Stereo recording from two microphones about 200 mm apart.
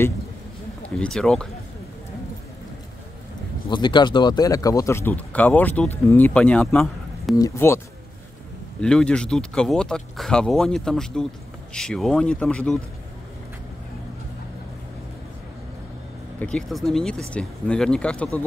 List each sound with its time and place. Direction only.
0.8 s speech: 5° left (ahead or behind)
3.7 s speech: 25° left (ahead or behind); by 7.3 s 5° left (ahead or behind)
7.3 s speech: 15° left (ahead or behind)
8.8 s speech: 5° left (ahead or behind)
16.3 s speech: 5° left (ahead or behind)